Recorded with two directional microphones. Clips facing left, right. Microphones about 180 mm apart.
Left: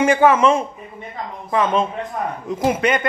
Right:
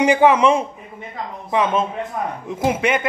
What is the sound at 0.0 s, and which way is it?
Speech, 15° right (ahead or behind).